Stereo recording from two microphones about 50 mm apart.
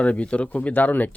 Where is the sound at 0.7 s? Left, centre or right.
Left.